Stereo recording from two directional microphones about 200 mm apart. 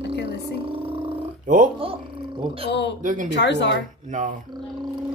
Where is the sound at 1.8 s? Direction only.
25° right (ahead or behind).